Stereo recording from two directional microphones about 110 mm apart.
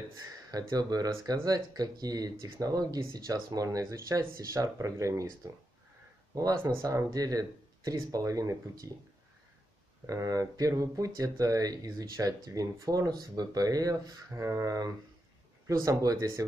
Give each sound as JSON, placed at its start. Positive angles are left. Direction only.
{"t": 0.5, "sound": "speech", "side_deg": -35}
{"t": 10.0, "sound": "speech", "side_deg": -30}